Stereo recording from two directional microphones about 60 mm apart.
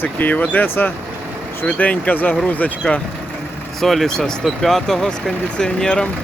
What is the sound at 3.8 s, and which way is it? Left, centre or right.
Speech, centre.